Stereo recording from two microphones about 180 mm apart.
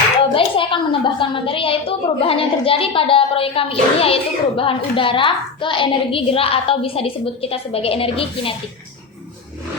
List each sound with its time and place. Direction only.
0.3 s a woman's voice: 30° left (ahead or behind)